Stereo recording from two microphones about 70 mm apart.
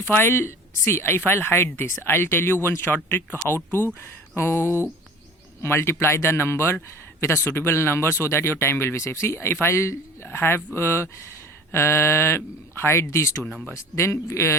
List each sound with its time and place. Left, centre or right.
0.2 s speech: left